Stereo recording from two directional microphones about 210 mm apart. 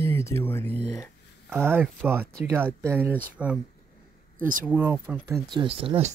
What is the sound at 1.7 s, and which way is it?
Speech, 10° right (ahead or behind).